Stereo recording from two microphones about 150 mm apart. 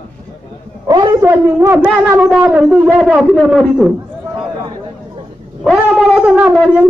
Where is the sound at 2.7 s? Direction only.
10° right (ahead or behind).